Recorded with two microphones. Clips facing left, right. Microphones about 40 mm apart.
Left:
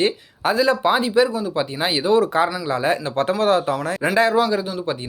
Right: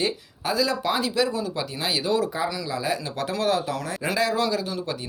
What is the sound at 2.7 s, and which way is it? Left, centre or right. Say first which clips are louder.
Speech: left 7 dB; left.